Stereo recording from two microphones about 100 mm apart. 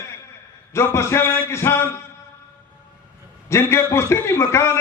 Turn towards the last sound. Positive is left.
turn(degrees=25)  # may be behind; listen again after turning